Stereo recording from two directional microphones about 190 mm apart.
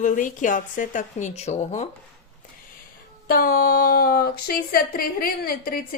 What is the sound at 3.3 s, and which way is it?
A woman's voice, 50° left (ahead or behind).